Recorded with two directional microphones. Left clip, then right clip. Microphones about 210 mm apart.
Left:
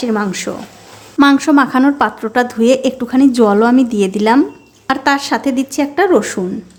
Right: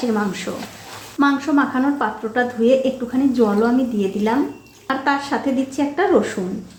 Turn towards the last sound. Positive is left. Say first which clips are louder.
# left 5 dB
turn(degrees=35)  # may be behind; listen again after turning